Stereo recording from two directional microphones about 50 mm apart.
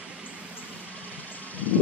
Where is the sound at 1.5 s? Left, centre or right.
Left.